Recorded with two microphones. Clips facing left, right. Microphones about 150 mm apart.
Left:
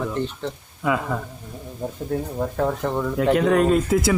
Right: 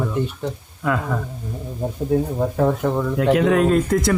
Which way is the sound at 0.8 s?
5° left (ahead or behind).